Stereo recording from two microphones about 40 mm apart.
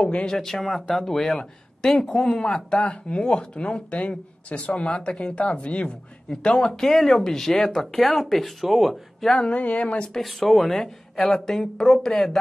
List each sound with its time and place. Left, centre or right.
0.0 s speech: left
6.3 s speech: centre
9.5 s speech: left
10.2 s speech: centre